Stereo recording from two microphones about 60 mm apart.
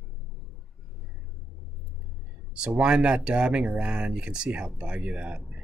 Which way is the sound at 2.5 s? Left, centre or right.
Centre.